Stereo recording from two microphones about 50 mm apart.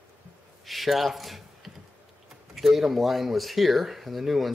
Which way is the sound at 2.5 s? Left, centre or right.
Centre.